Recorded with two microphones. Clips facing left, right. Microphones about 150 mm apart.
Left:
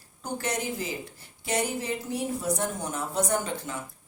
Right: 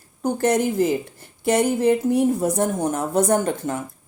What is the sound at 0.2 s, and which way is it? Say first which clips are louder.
Speech: right 12 dB; 50° right (ahead or behind).